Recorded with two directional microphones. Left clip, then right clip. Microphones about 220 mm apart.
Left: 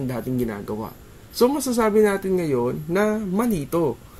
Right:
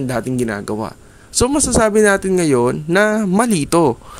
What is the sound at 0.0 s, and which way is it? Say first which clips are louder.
Speech: right 6 dB; 25° right (ahead or behind).